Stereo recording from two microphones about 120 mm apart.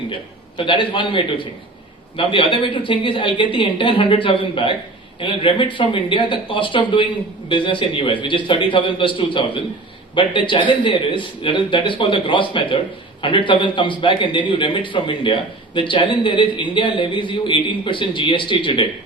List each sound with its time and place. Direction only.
0.1 s a man's voice: 45° left (ahead or behind)